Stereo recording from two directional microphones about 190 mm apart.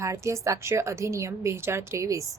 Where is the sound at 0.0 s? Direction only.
15° right (ahead or behind).